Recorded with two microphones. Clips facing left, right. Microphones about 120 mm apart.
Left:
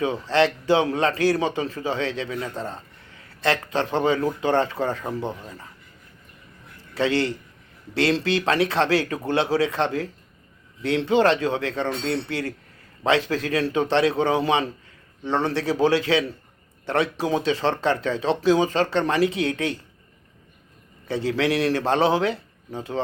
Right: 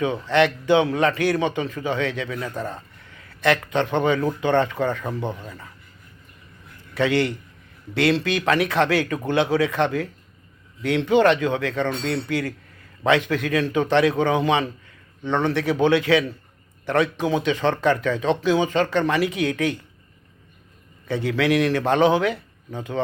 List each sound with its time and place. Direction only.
0.0 s a man's voice: 30° left (ahead or behind)
6.9 s a man's voice: 30° left (ahead or behind)
21.1 s speech: 30° left (ahead or behind)